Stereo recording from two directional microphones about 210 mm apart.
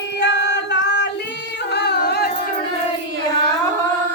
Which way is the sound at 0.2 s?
55° left (ahead or behind).